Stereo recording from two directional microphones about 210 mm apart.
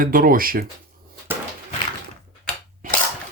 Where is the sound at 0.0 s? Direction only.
45° right (ahead or behind).